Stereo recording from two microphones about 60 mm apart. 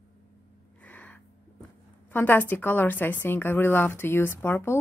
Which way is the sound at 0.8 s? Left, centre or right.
Left.